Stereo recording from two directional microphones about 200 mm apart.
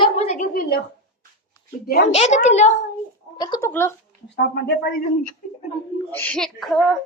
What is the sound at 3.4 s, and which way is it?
Speech, 20° left (ahead or behind).